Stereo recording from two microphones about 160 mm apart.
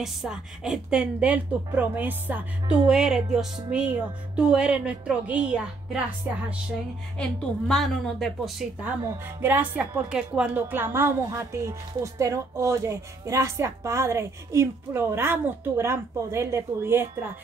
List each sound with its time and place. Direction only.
0.0 s a woman's voice: 5° right (ahead or behind)
7.2 s a woman's voice: 5° left (ahead or behind); by 17.3 s 15° right (ahead or behind)